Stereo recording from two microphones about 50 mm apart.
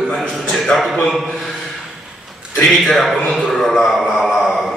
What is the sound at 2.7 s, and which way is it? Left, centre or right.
A man's voice, centre.